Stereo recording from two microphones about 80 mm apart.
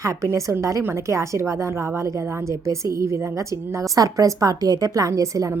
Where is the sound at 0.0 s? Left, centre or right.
Right.